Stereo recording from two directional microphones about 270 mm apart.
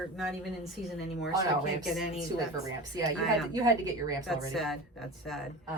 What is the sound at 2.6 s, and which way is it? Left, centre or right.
A woman's voice, centre.